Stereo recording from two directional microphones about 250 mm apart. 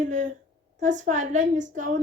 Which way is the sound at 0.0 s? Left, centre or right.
Right.